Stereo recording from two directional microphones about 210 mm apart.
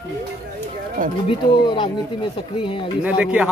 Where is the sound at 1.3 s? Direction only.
20° left (ahead or behind).